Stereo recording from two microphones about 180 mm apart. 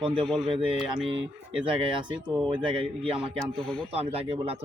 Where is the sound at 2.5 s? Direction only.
25° right (ahead or behind).